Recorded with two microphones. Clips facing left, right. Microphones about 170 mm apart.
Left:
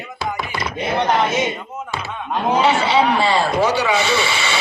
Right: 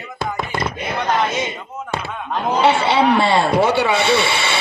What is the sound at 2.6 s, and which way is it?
A man's voice, 60° right (ahead or behind).